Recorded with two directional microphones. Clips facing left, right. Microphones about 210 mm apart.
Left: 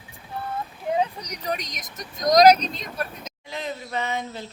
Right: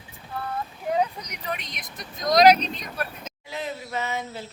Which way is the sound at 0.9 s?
35° left (ahead or behind).